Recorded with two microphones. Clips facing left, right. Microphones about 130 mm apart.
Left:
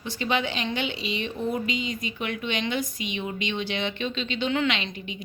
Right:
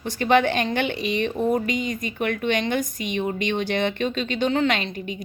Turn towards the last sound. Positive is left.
turn(degrees=-45)  # may be behind; listen again after turning